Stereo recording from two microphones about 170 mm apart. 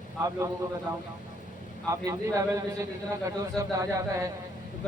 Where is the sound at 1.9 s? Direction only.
20° right (ahead or behind).